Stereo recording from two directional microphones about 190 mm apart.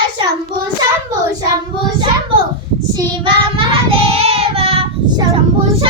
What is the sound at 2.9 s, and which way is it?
Child singing, 25° right (ahead or behind).